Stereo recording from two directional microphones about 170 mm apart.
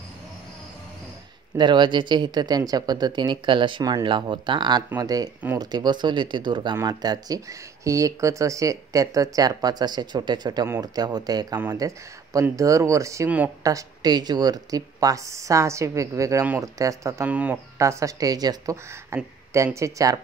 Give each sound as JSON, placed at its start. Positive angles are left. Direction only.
{"t": 1.6, "sound": "speech", "side_deg": -25}